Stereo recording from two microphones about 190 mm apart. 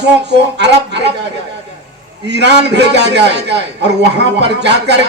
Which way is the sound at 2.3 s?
65° right (ahead or behind).